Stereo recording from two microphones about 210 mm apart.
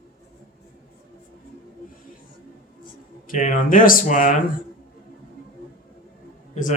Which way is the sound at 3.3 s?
40° left (ahead or behind).